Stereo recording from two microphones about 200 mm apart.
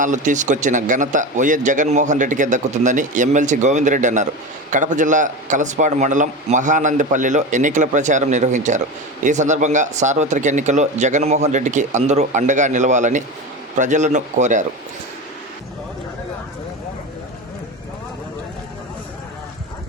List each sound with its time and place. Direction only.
0.0 s a man's voice: 40° right (ahead or behind)